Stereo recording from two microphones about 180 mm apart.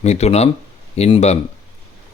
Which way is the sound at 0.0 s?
35° left (ahead or behind).